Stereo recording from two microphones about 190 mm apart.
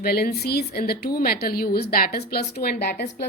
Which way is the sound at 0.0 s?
55° left (ahead or behind).